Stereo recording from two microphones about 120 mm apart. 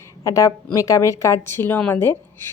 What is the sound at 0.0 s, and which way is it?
A woman's voice, 25° left (ahead or behind).